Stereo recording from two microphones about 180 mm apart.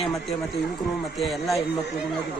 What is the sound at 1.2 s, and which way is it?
Speech, centre (ahead or behind).